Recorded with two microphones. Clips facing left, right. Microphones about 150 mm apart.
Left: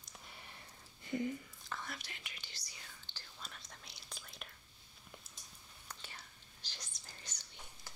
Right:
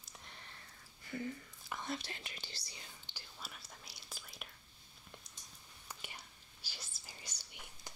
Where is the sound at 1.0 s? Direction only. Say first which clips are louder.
Left 4 dB; 20° left (ahead or behind).